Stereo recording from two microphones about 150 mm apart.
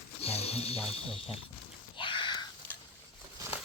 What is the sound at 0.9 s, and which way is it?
Speech, 40° left (ahead or behind).